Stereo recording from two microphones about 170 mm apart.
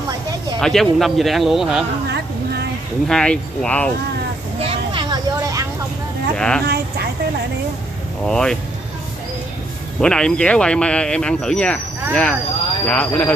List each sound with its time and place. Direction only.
0.6 s speech: centre (ahead or behind)
2.0 s a sound: 80° right
3.1 s speech: 5° left (ahead or behind)
4.6 s vehicle: 30° right (ahead or behind)
6.3 s speech: 5° left (ahead or behind)
6.6 s speech: 70° right (ahead or behind)
8.3 s speech: 5° left (ahead or behind)
9.9 s speech: 5° left (ahead or behind)